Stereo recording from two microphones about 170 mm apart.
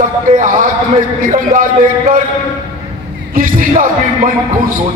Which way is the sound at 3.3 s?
55° right (ahead or behind).